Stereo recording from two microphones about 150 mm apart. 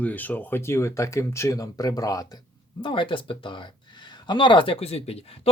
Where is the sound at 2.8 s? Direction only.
35° left (ahead or behind).